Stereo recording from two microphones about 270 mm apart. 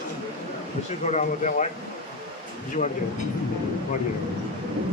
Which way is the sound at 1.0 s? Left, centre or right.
Left.